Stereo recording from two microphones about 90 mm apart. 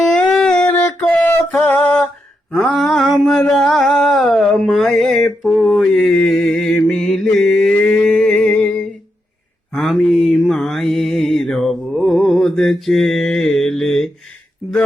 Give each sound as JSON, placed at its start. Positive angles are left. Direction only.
{"t": 0.0, "sound": "a sound", "side_deg": 10}
{"t": 1.5, "sound": "music", "side_deg": 20}
{"t": 2.6, "sound": "mantra", "side_deg": 0}
{"t": 9.7, "sound": "mantra", "side_deg": 0}